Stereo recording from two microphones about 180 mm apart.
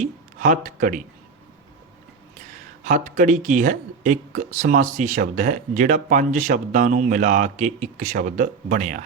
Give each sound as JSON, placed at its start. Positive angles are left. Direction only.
{"t": 0.0, "sound": "speech", "side_deg": -45}
{"t": 2.8, "sound": "speech", "side_deg": -45}